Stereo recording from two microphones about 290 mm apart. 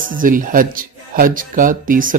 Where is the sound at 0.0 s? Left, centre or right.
Right.